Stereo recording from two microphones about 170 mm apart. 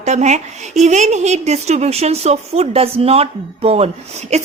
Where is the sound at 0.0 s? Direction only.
40° right (ahead or behind).